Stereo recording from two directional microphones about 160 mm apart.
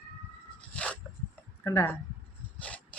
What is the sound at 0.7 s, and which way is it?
Dog, 10° left (ahead or behind).